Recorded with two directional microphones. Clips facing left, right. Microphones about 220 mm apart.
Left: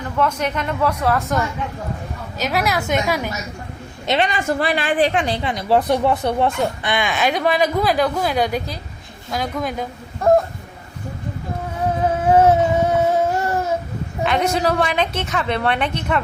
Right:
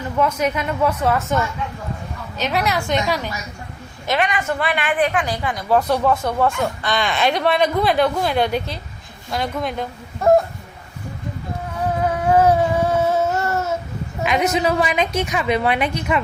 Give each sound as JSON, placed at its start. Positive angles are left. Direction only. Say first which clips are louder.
{"t": 0.2, "sound": "a woman's voice", "louder": "right 1 dB", "side_deg": -5}
{"t": 2.4, "sound": "a woman's voice", "louder": "even", "side_deg": 0}
{"t": 4.0, "sound": "a woman's voice", "louder": "left 1 dB", "side_deg": 25}
{"t": 12.3, "sound": "a sound", "louder": "left 1 dB", "side_deg": 25}
{"t": 14.3, "sound": "a woman's voice", "louder": "even", "side_deg": -5}